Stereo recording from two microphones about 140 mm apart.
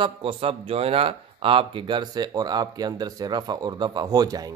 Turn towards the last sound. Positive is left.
turn(degrees=-25)  # may be behind; listen again after turning